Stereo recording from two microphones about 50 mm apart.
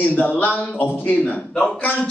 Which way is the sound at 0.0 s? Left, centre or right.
Left.